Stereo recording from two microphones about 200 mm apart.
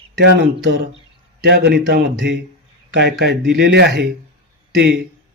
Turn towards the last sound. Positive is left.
turn(degrees=-60)  # may be behind; listen again after turning